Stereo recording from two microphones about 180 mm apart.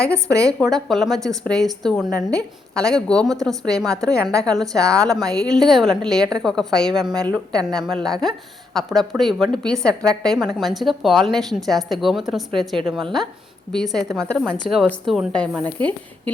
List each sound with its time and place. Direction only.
0.1 s speech: 15° right (ahead or behind)
0.9 s speech: centre (ahead or behind)
5.0 s speech: 20° right (ahead or behind)
5.6 s speech: centre (ahead or behind)